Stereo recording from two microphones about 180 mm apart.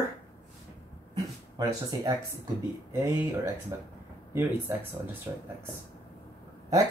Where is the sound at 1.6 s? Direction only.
20° right (ahead or behind).